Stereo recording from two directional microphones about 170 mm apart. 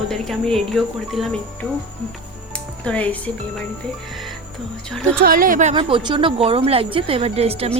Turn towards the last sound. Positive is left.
turn(degrees=-35)  # may be behind; listen again after turning